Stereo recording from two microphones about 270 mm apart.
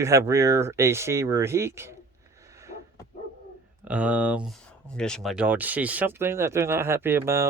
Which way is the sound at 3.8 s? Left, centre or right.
Centre.